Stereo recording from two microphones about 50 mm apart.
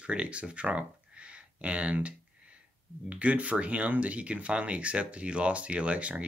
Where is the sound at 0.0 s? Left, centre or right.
Right.